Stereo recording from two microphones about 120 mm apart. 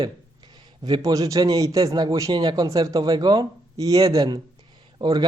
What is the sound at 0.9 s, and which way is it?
A man's voice, 35° right (ahead or behind).